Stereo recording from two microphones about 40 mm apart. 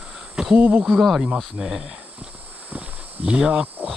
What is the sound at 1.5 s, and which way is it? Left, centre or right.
Speech, centre.